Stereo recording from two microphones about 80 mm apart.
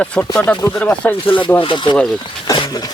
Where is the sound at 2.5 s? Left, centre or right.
Left.